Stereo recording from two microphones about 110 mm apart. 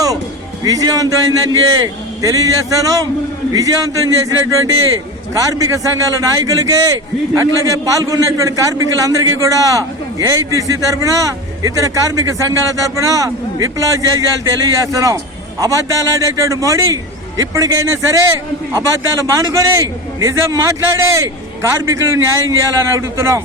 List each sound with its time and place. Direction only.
0.6 s a man's voice: 35° right (ahead or behind)